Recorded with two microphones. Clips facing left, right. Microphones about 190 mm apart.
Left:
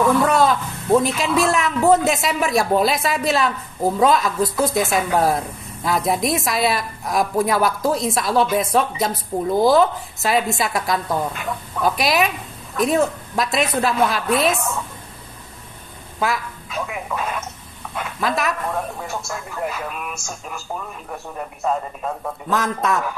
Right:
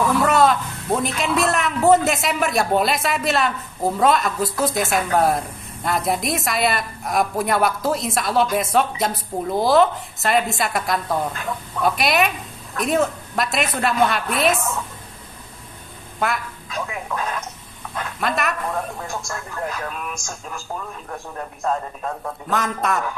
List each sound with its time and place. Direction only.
0.3 s a man's voice: centre (ahead or behind)
16.2 s a man's voice: 5° left (ahead or behind)